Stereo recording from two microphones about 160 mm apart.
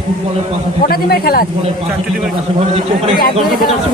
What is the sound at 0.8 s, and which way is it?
Speech, 70° left (ahead or behind).